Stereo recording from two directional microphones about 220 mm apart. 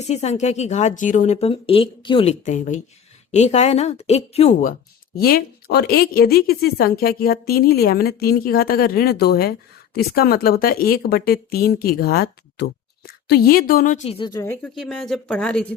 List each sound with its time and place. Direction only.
0.0 s a woman's voice: 30° left (ahead or behind)
5.1 s speech: 40° left (ahead or behind); by 15.6 s 5° left (ahead or behind)